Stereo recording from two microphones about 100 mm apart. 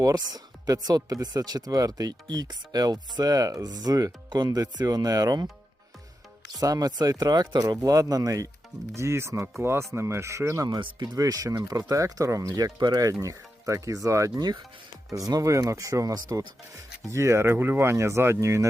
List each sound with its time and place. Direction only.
0.0 s speech: 40° right (ahead or behind)
6.6 s speech: 40° right (ahead or behind)
13.2 s speech: 30° right (ahead or behind)
17.1 s speech: 30° right (ahead or behind)